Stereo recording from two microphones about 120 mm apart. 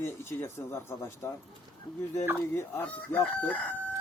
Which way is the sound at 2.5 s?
20° left (ahead or behind).